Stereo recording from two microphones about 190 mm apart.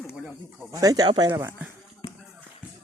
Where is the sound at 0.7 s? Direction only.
20° right (ahead or behind).